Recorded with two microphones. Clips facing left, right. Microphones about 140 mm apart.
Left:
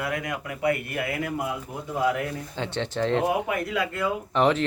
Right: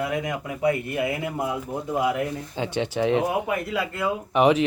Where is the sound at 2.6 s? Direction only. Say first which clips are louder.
Right 3 dB; 10° right (ahead or behind).